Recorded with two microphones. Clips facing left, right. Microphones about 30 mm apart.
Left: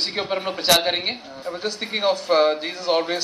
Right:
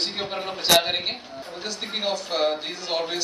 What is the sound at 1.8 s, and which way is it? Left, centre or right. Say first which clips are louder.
Speech: left 5 dB; left.